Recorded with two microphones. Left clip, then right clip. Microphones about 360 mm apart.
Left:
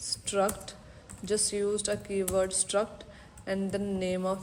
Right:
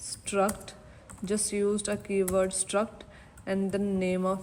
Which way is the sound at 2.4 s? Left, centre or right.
Centre.